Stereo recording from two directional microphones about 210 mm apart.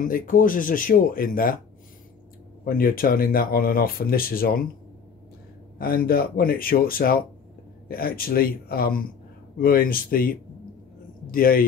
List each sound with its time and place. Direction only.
0.0 s speech: 40° left (ahead or behind)
2.6 s speech: 45° left (ahead or behind)
5.8 s speech: 45° left (ahead or behind)